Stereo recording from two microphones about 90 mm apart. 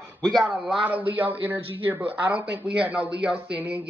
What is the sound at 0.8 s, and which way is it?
Speech, 20° right (ahead or behind).